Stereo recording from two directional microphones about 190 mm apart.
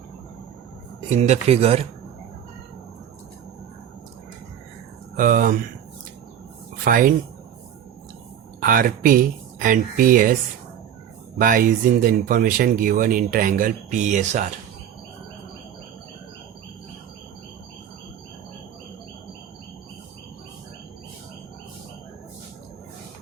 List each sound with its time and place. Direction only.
1.1 s speech: 35° right (ahead or behind)
5.1 s speech: 45° right (ahead or behind)
6.8 s speech: 50° right (ahead or behind)
8.6 s speech: 45° right (ahead or behind)
11.3 s speech: 45° right (ahead or behind)